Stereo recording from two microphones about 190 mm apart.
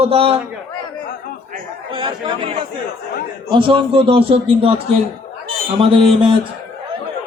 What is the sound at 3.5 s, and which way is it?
A man's voice, 25° right (ahead or behind).